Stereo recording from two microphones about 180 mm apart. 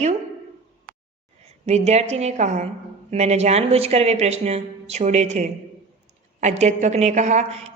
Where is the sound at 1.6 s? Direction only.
35° right (ahead or behind).